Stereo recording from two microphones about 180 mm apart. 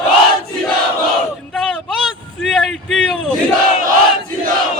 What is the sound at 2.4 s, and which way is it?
Speech, 5° left (ahead or behind).